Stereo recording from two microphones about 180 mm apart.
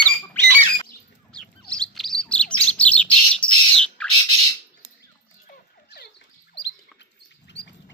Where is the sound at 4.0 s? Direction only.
5° left (ahead or behind).